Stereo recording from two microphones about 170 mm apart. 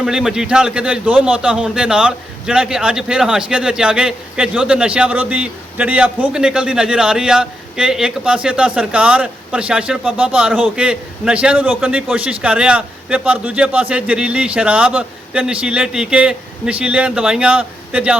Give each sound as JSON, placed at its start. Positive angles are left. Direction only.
{"t": 0.0, "sound": "a man's voice", "side_deg": -5}